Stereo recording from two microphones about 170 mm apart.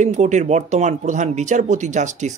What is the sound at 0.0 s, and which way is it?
Speech, 45° right (ahead or behind).